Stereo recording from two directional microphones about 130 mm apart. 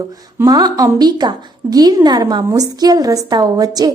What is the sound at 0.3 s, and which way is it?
A woman's voice, 30° right (ahead or behind).